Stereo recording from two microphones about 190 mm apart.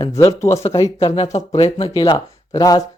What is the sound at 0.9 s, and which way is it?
Speech, 30° left (ahead or behind).